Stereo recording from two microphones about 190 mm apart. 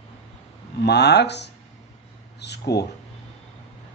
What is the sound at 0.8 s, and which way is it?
Speech, 60° left (ahead or behind).